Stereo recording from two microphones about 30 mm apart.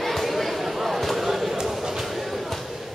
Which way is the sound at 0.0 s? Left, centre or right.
Centre.